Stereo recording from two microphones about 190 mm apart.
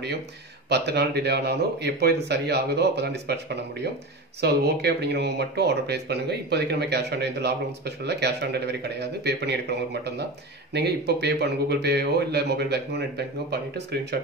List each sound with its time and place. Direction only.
0.7 s speech: 60° right (ahead or behind)